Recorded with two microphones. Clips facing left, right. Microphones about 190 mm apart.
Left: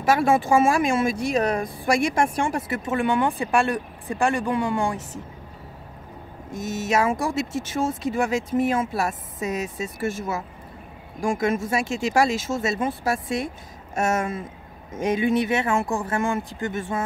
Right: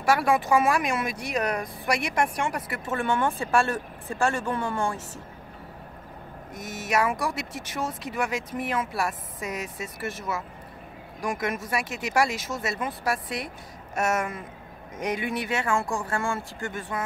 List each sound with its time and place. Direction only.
0.0 s speech: 25° left (ahead or behind)
2.9 s speech: 15° left (ahead or behind)
6.5 s speech: 25° left (ahead or behind)